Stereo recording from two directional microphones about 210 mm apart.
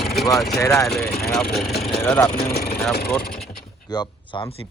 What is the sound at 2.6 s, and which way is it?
Speech, 45° left (ahead or behind).